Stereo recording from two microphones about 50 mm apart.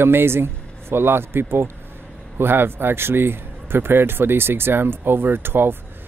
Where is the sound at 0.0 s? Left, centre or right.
Right.